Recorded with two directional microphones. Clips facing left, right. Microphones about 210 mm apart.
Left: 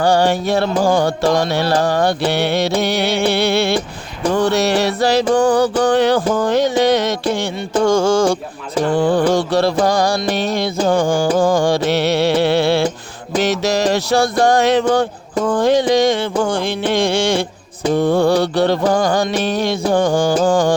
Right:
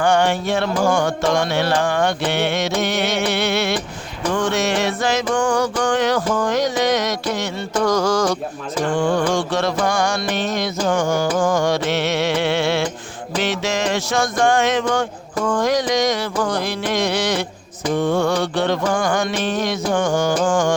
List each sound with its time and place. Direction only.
0.0 s music: 35° left (ahead or behind)